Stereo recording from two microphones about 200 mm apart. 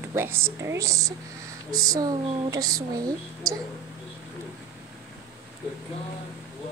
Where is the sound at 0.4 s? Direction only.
15° right (ahead or behind).